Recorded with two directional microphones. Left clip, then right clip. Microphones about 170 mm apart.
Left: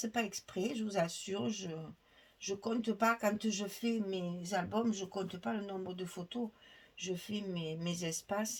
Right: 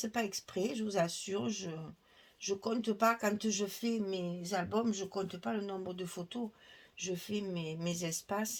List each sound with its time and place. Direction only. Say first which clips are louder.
0.0 s speech: right 1 dB; 40° right (ahead or behind)